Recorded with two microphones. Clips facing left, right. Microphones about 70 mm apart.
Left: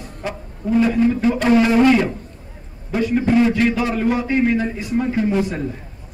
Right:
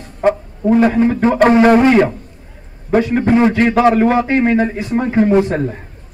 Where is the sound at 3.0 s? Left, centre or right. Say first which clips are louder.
Right 4 dB; right.